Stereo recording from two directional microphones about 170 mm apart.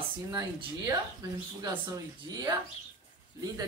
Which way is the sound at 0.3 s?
25° right (ahead or behind).